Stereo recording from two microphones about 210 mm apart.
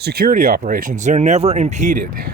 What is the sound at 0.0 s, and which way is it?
Speech, 45° right (ahead or behind).